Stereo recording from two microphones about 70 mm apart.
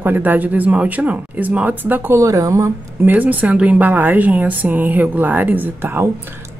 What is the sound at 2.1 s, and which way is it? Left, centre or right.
Speech, right.